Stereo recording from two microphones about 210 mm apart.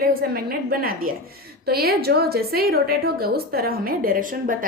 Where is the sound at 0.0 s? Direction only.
45° right (ahead or behind).